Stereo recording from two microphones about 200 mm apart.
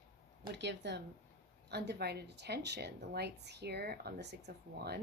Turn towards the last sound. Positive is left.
turn(degrees=-55)  # may be behind; listen again after turning